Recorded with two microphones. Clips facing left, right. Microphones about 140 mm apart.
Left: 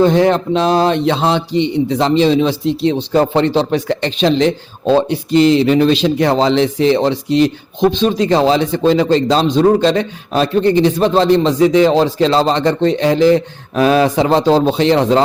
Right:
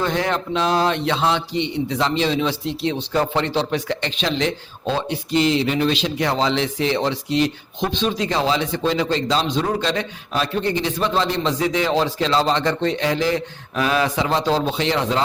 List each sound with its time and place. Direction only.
0.0 s a man's voice: 25° left (ahead or behind)